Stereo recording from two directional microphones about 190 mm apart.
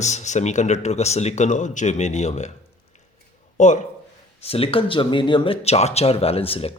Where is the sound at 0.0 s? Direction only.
35° left (ahead or behind).